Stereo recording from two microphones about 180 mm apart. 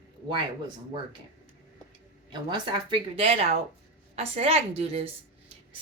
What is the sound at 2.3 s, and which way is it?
A woman's voice, 25° right (ahead or behind).